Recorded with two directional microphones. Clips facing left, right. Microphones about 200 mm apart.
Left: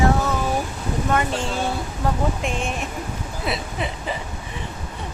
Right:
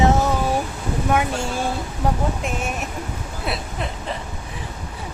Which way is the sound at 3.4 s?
Centre (ahead or behind).